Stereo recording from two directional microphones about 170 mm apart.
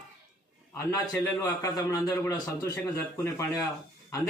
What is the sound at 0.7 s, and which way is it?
A man's voice, 15° left (ahead or behind).